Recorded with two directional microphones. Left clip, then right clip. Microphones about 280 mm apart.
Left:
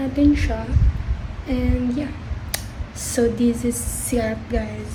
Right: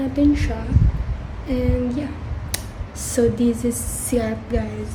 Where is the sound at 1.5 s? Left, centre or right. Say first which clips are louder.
Right 1 dB; centre.